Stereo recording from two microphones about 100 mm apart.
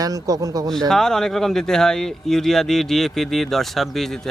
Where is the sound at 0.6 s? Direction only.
5° left (ahead or behind).